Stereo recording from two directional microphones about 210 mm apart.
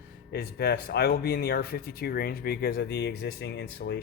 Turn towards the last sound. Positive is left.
turn(degrees=55)  # may be behind; listen again after turning